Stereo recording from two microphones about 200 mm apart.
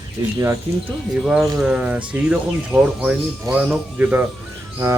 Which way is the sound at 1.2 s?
Centre (ahead or behind).